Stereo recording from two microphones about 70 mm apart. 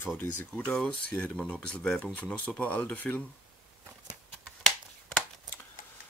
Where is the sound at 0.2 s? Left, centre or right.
Left.